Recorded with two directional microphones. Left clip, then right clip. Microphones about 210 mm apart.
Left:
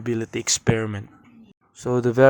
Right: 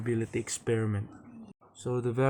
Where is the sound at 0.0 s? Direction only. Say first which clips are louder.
Left 6 dB; 40° left (ahead or behind).